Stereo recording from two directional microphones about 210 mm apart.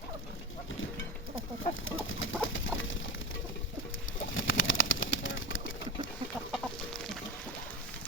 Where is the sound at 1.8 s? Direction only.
70° left (ahead or behind).